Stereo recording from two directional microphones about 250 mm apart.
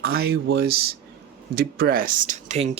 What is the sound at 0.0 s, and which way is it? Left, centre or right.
Speech, right.